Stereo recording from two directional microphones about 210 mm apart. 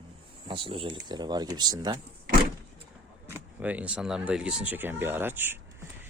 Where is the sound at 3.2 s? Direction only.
10° right (ahead or behind).